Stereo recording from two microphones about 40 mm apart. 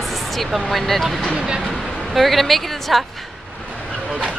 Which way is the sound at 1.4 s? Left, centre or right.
Centre.